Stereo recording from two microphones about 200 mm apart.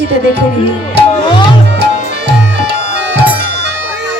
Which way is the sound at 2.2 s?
60° right (ahead or behind).